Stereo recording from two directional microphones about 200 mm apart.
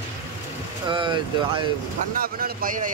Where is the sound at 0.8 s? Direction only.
25° right (ahead or behind).